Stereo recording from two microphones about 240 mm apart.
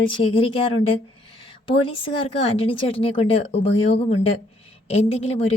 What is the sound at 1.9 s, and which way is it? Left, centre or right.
A woman's voice, left.